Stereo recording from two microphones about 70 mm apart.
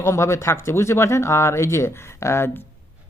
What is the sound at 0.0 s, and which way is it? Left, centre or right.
Speech, left.